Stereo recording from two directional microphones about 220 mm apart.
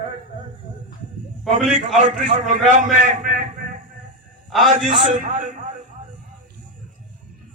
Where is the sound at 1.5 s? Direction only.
35° right (ahead or behind).